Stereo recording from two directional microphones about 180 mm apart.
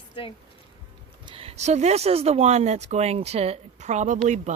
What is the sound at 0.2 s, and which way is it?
Speech, 30° left (ahead or behind).